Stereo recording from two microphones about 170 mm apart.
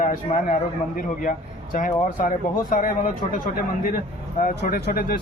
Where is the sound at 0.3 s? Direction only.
50° left (ahead or behind).